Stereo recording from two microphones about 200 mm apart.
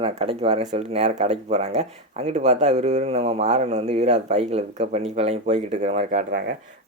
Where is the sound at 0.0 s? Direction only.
30° right (ahead or behind).